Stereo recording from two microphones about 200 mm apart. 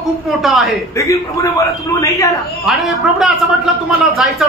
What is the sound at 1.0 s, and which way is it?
A man's voice, 15° left (ahead or behind).